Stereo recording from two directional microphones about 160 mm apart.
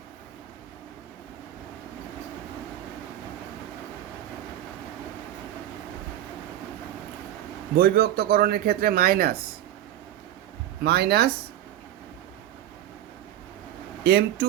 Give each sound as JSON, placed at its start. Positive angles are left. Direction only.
{"t": 7.8, "sound": "speech", "side_deg": -70}
{"t": 10.8, "sound": "speech", "side_deg": -90}
{"t": 14.0, "sound": "speech", "side_deg": -85}